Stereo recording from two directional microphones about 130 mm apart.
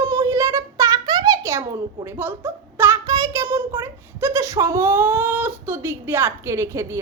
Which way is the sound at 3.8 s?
15° right (ahead or behind).